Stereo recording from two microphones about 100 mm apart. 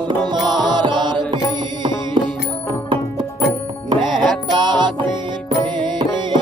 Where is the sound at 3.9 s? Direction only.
50° right (ahead or behind).